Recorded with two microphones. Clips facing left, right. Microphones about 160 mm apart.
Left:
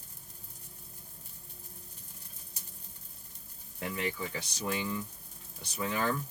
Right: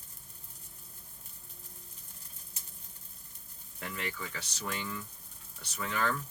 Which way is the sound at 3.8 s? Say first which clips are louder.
Left 4 dB; 15° left (ahead or behind).